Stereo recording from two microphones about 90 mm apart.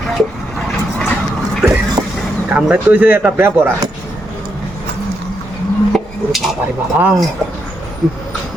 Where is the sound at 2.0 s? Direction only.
45° right (ahead or behind).